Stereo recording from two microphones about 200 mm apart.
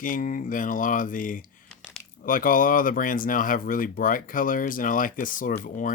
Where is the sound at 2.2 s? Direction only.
45° left (ahead or behind).